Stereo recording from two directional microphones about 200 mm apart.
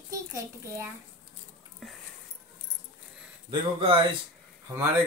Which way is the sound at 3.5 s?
25° right (ahead or behind).